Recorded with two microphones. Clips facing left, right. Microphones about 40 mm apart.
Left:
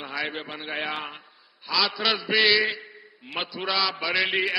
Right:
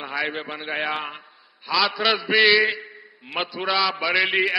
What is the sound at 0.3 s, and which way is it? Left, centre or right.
A man's voice, centre.